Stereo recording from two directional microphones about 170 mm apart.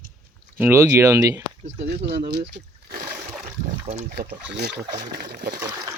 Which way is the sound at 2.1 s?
75° right (ahead or behind).